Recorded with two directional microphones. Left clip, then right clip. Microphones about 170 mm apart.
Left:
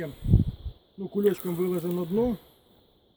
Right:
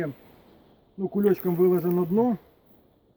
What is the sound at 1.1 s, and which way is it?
Speech, 25° left (ahead or behind).